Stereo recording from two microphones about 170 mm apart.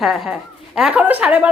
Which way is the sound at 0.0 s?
Centre (ahead or behind).